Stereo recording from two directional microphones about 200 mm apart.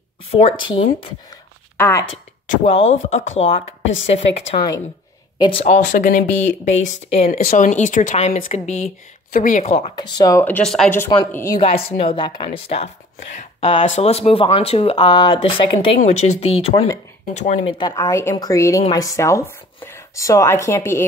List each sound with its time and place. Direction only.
0.4 s speech: 25° left (ahead or behind)
1.8 s speech: 10° left (ahead or behind)
2.4 s speech: 30° left (ahead or behind)
3.8 s speech: 70° left (ahead or behind)
5.4 s speech: 30° left (ahead or behind)
7.2 s speech: 45° left (ahead or behind)
9.9 s speech: 20° left (ahead or behind)
11.6 s speech: 30° left (ahead or behind); by 21.0 s 15° left (ahead or behind)